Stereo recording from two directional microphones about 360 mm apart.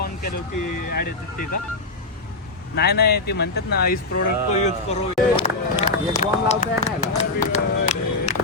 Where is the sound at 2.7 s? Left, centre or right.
Left.